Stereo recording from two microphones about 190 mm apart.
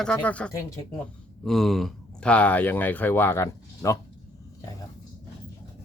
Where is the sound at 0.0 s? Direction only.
5° left (ahead or behind).